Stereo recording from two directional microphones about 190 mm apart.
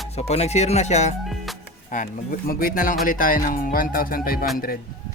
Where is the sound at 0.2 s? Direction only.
35° left (ahead or behind); by 4.8 s 50° left (ahead or behind).